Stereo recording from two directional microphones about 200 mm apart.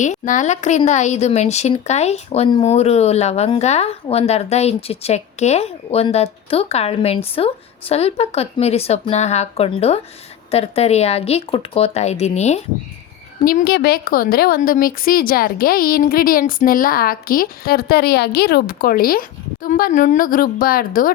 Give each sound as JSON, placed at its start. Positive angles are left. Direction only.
{"t": 0.0, "sound": "speech", "side_deg": 40}
{"t": 13.4, "sound": "a woman's voice", "side_deg": 45}